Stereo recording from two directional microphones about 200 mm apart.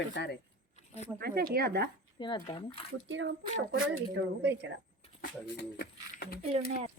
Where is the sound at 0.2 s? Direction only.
55° left (ahead or behind).